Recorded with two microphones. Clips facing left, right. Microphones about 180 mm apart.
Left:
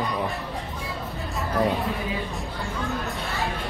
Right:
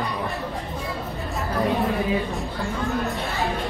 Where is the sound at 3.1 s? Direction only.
Centre (ahead or behind).